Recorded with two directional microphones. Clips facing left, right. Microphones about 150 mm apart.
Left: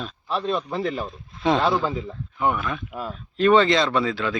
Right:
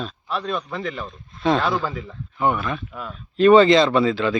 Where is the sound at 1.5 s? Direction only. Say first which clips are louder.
Left 1 dB; 20° left (ahead or behind).